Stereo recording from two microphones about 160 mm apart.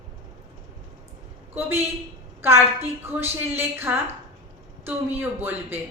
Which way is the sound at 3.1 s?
15° right (ahead or behind).